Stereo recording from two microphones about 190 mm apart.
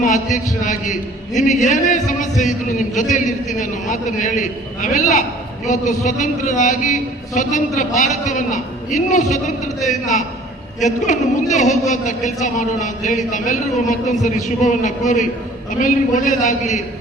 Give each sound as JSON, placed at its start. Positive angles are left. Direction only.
{"t": 0.0, "sound": "a woman's voice", "side_deg": 40}